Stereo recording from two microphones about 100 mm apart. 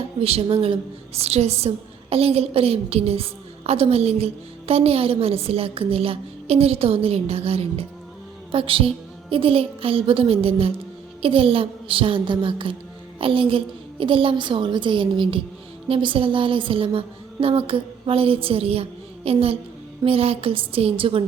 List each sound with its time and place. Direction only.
0.2 s a woman's voice: 90° right
0.4 s a woman's voice: 60° right (ahead or behind); by 4.3 s 90° right
4.7 s a woman's voice: 80° right
8.5 s a woman's voice: 60° right (ahead or behind)